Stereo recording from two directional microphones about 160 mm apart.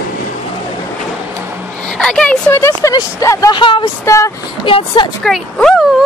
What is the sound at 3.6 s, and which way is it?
Speech, 35° left (ahead or behind).